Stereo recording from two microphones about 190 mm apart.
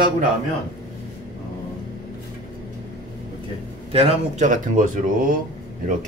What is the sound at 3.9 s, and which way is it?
Speech, 30° right (ahead or behind).